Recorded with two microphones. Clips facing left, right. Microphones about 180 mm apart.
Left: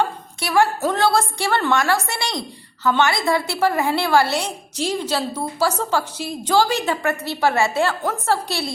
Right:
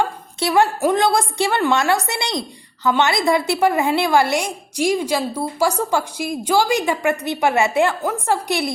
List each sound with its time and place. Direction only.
0.3 s a woman's voice: 20° right (ahead or behind)